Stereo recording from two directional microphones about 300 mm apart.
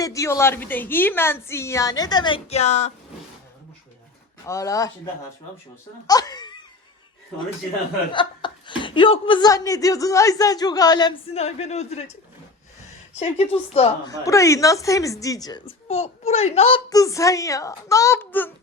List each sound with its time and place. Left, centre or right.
0.0 s a woman's voice: centre
4.4 s a woman's voice: centre
6.1 s a woman's voice: centre
8.1 s a woman's voice: centre
13.1 s a woman's voice: centre